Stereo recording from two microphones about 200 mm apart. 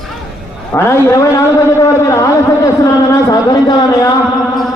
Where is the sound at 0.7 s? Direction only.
15° left (ahead or behind).